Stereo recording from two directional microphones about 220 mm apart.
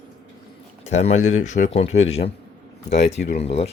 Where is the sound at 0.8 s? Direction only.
30° left (ahead or behind).